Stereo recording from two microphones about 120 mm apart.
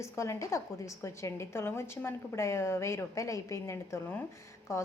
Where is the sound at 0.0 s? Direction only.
25° left (ahead or behind).